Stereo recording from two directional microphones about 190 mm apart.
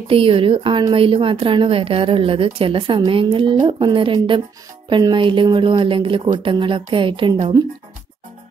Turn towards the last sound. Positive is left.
turn(degrees=-20)  # may be behind; listen again after turning